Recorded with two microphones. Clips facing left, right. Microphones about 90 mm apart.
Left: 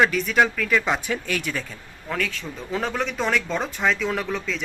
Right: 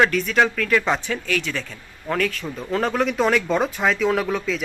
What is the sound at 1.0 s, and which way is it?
Speech, 15° left (ahead or behind).